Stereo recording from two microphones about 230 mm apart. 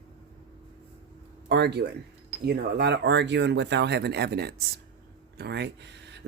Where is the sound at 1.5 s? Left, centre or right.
Right.